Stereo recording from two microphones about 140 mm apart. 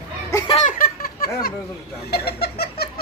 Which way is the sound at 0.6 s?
80° left.